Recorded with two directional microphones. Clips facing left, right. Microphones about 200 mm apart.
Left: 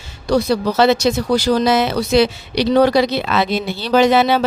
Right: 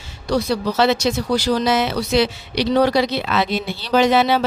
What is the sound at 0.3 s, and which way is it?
Speech, 45° left (ahead or behind).